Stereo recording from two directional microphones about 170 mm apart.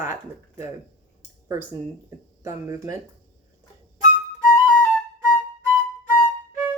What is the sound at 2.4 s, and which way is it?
Speech, 20° right (ahead or behind).